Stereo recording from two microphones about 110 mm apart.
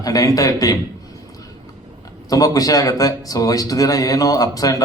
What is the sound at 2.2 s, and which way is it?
Speech, 30° left (ahead or behind).